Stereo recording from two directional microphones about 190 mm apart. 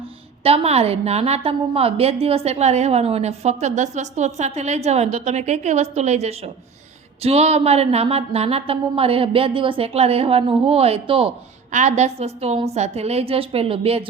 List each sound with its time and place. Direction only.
0.4 s a woman's voice: 30° right (ahead or behind)
11.7 s a woman's voice: 40° right (ahead or behind)